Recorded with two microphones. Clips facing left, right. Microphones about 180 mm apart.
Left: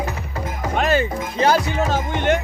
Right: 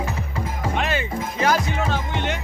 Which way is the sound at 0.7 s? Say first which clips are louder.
Left 7 dB; 40° left (ahead or behind).